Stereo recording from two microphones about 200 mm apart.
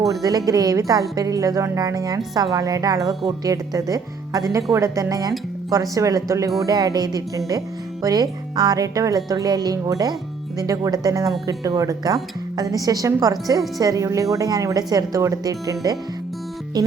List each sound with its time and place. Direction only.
0.1 s speech: 20° right (ahead or behind)
16.8 s music: 20° right (ahead or behind)